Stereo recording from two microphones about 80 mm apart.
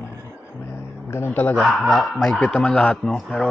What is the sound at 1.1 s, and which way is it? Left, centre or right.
Speech, left.